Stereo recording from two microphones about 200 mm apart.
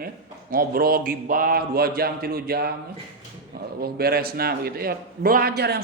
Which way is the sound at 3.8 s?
50° right (ahead or behind).